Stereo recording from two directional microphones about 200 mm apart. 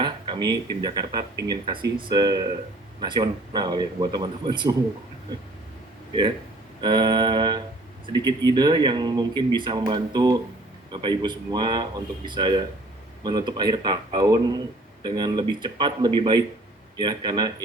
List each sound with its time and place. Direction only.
0.0 s speech: 20° right (ahead or behind)
6.8 s speech: 20° right (ahead or behind)